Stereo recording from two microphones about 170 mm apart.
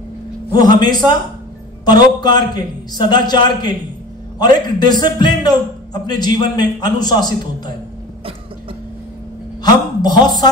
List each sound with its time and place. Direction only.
0.7 s a man's voice: 25° left (ahead or behind)
9.6 s a woman's voice: 25° left (ahead or behind)